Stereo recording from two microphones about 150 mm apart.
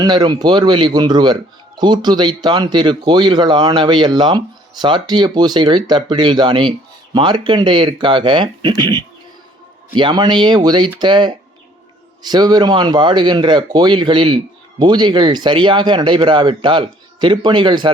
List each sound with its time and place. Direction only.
0.0 s speech: 30° right (ahead or behind)